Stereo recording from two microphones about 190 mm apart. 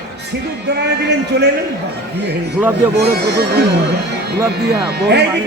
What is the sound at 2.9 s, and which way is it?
A man's voice, 60° right (ahead or behind).